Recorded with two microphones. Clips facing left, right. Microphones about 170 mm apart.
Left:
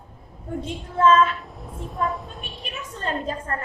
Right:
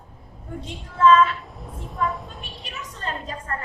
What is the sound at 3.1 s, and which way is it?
Speech, 40° left (ahead or behind).